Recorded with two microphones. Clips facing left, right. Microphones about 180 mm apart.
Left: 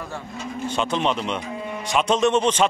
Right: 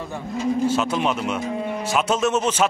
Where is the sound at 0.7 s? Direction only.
5° right (ahead or behind).